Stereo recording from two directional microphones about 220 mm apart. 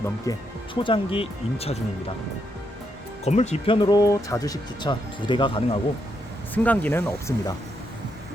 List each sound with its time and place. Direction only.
0.3 s speech: 20° left (ahead or behind)
3.2 s speech: 30° left (ahead or behind)
6.5 s speech: 5° left (ahead or behind)